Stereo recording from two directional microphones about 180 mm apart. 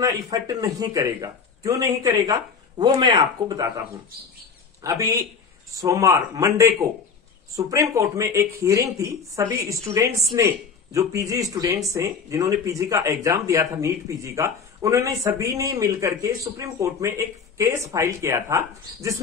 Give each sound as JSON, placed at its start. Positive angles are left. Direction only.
{"t": 0.0, "sound": "a man's voice", "side_deg": -20}
{"t": 4.8, "sound": "a man's voice", "side_deg": -20}